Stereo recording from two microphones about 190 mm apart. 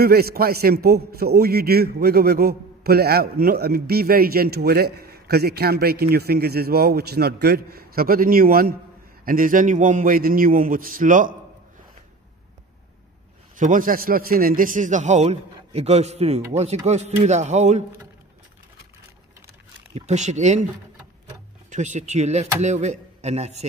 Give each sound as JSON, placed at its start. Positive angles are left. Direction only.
{"t": 0.0, "sound": "a man's voice", "side_deg": -55}
{"t": 13.6, "sound": "a man's voice", "side_deg": -45}
{"t": 19.9, "sound": "a man's voice", "side_deg": -35}
{"t": 21.6, "sound": "a man's voice", "side_deg": -40}